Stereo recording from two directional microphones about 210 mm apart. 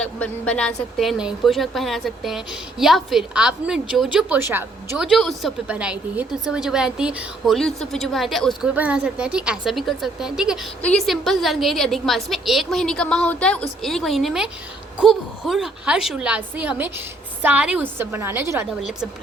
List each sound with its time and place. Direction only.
0.0 s a woman's voice: 5° left (ahead or behind); by 18.7 s 10° right (ahead or behind)